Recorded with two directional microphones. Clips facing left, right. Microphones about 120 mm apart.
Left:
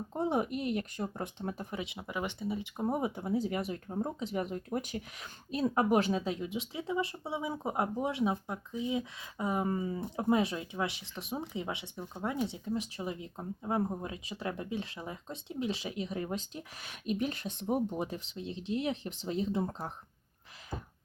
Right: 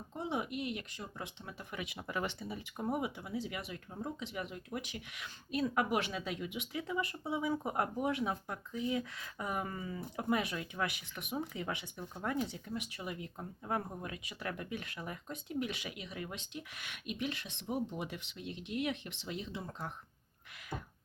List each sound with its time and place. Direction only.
0.1 s speech: 45° left (ahead or behind)
1.7 s speech: 25° left (ahead or behind)
2.9 s speech: 35° left (ahead or behind)